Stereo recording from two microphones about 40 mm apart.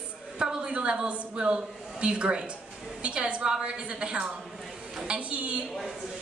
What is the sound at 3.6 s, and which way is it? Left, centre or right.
Speech, right.